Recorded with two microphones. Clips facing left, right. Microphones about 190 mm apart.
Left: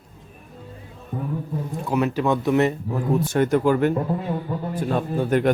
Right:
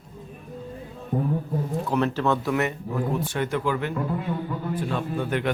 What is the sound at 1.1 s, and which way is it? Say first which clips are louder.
Speech: right 4 dB; 35° right (ahead or behind).